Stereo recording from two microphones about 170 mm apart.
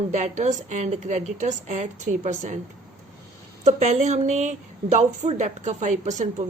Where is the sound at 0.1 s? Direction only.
45° right (ahead or behind).